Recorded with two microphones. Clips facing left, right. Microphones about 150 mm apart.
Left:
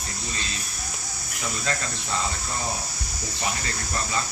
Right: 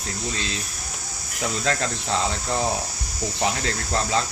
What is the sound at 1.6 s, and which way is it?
Speech, 85° right.